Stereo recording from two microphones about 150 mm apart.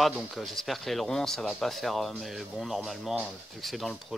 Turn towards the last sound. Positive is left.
turn(degrees=0)  # may be behind; listen again after turning